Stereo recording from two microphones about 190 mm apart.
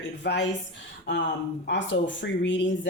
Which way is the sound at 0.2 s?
60° left (ahead or behind).